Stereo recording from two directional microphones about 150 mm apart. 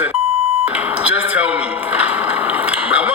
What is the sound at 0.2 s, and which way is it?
Beep, 40° right (ahead or behind).